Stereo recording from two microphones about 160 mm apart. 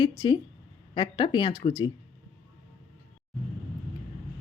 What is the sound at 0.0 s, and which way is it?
A woman's voice, 25° left (ahead or behind).